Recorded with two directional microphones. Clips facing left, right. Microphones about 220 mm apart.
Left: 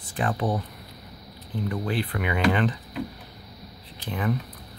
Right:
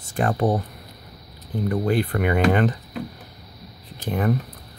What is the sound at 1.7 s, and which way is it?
Speech, 45° right (ahead or behind).